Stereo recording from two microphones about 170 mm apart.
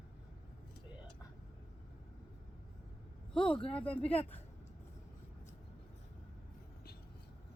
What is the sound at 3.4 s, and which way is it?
Speech, 30° left (ahead or behind).